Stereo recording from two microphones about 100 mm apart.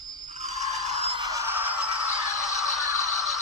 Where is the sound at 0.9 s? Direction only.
85° right.